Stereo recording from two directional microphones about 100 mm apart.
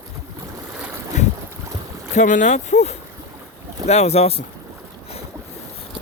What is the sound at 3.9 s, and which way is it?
Speech, 90° left.